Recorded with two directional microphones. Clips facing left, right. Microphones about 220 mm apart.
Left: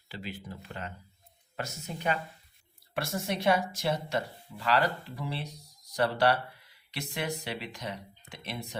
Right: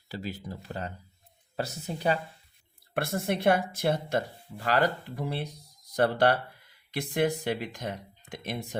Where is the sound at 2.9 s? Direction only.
55° right (ahead or behind).